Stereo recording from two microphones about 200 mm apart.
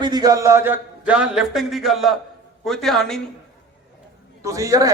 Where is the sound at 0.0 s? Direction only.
20° right (ahead or behind); by 3.2 s centre (ahead or behind).